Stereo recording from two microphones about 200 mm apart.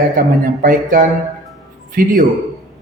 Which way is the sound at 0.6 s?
45° right (ahead or behind).